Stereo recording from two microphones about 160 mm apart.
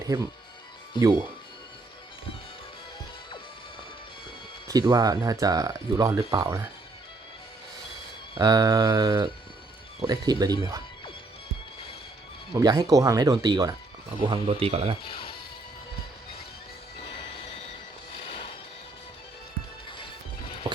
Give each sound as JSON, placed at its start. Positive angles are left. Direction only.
{"t": 0.0, "sound": "speech", "side_deg": -20}
{"t": 4.7, "sound": "speech", "side_deg": -25}
{"t": 8.4, "sound": "speech", "side_deg": -25}
{"t": 12.5, "sound": "speech", "side_deg": -20}
{"t": 14.2, "sound": "speech", "side_deg": -35}
{"t": 18.2, "sound": "music", "side_deg": 30}
{"t": 20.7, "sound": "a sound", "side_deg": -30}